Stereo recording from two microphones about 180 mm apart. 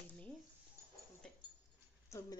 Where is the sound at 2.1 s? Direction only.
15° left (ahead or behind).